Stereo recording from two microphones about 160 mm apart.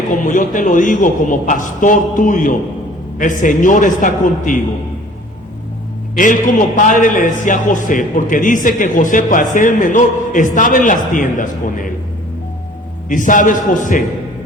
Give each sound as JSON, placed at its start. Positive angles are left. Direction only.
{"t": 0.1, "sound": "a man's voice", "side_deg": 55}
{"t": 6.1, "sound": "a man's voice", "side_deg": 55}
{"t": 13.1, "sound": "a man's voice", "side_deg": 55}